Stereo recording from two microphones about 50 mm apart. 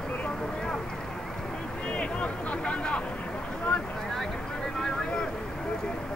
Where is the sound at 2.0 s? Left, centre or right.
Left.